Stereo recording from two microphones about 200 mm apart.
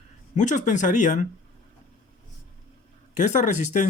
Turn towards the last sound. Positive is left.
turn(degrees=35)  # may be behind; listen again after turning